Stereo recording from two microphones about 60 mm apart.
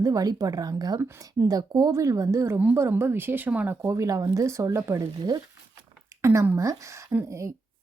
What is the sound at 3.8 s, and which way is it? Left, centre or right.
Speech, right.